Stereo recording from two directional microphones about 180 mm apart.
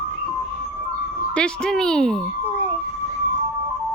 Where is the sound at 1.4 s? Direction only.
5° left (ahead or behind).